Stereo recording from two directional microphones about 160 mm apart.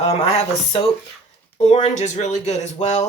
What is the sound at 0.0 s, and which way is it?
Speech, 40° left (ahead or behind).